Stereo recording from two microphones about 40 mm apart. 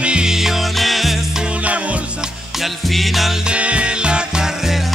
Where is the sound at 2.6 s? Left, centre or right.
Centre.